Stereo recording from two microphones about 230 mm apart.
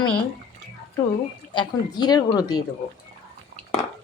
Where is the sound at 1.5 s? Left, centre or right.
Centre.